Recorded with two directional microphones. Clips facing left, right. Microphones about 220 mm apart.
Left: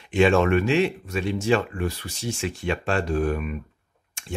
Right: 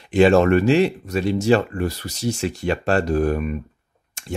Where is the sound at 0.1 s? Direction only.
40° right (ahead or behind).